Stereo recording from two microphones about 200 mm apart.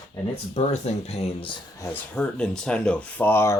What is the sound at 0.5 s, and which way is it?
Speech, 35° left (ahead or behind).